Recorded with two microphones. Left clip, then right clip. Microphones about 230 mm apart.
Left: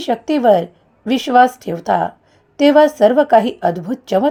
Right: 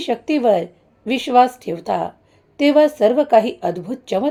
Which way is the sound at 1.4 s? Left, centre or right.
Left.